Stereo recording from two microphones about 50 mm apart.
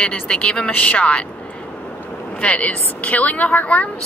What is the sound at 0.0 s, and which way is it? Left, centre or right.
A woman's voice, left.